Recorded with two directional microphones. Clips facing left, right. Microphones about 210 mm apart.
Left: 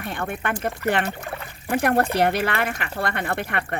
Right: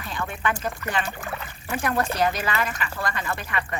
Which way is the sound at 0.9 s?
65° left (ahead or behind).